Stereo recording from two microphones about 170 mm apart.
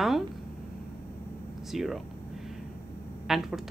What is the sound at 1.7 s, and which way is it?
Speech, centre (ahead or behind).